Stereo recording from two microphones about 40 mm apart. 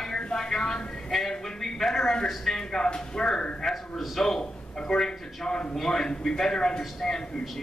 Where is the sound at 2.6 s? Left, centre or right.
Centre.